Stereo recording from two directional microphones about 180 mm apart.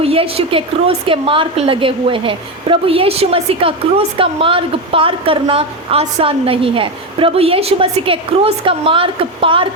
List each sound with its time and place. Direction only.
0.0 s a woman's voice: 35° right (ahead or behind)